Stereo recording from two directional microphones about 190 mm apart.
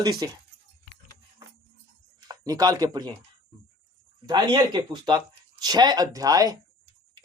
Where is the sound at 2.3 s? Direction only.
20° right (ahead or behind).